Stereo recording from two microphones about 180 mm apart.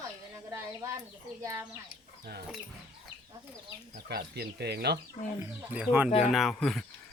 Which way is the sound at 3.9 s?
60° right (ahead or behind).